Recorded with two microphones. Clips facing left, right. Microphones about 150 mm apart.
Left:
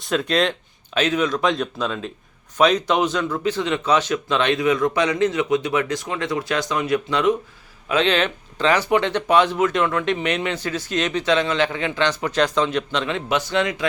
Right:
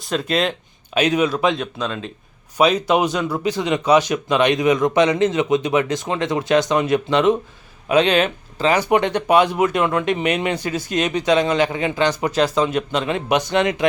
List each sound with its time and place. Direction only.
0.0 s speech: centre (ahead or behind)
2.6 s speech: 10° right (ahead or behind)